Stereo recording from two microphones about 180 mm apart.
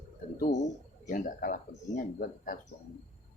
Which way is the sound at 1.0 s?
50° left (ahead or behind).